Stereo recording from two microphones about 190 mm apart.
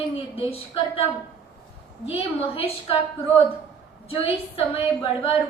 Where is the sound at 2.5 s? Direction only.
30° left (ahead or behind).